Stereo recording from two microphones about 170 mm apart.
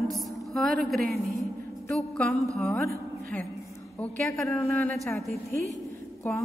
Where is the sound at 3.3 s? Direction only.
10° left (ahead or behind).